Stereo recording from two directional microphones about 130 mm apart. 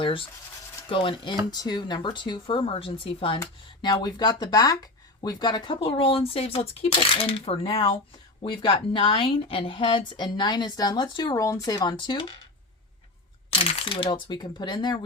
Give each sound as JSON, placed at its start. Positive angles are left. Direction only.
{"t": 0.0, "sound": "rub", "side_deg": 40}
{"t": 0.9, "sound": "speech", "side_deg": 40}
{"t": 3.4, "sound": "speech", "side_deg": 30}
{"t": 13.5, "sound": "speech", "side_deg": 45}